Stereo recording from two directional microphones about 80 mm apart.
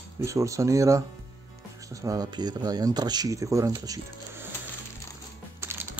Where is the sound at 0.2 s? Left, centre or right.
Right.